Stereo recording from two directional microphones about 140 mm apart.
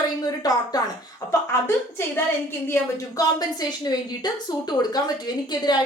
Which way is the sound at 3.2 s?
30° left (ahead or behind).